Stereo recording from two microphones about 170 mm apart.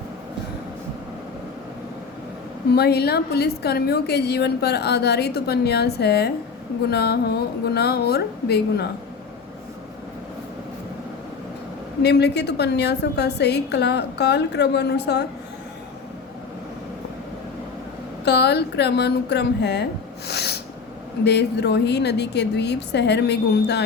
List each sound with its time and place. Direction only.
2.7 s a woman's voice: 70° left (ahead or behind)
12.0 s a woman's voice: 80° left
18.3 s a woman's voice: 75° left (ahead or behind)